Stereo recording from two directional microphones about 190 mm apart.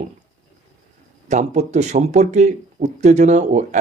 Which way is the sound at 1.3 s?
35° right (ahead or behind).